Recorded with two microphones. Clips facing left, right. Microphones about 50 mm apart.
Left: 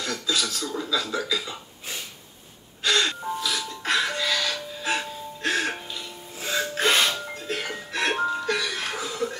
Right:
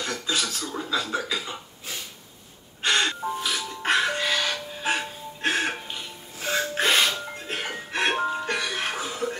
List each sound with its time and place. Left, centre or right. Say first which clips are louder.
0.0 s cough: left 1 dB; right
2.8 s music: even; right